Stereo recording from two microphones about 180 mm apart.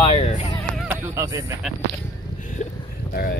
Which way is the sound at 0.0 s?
30° left (ahead or behind).